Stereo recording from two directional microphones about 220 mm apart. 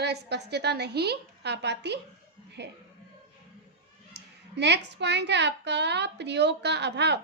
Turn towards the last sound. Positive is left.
turn(degrees=-50)  # may be behind; listen again after turning